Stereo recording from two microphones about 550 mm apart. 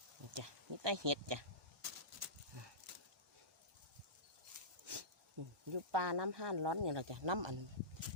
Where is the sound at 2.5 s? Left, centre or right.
Right.